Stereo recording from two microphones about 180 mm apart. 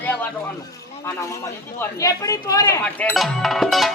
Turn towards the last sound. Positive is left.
turn(degrees=0)  # may be behind; listen again after turning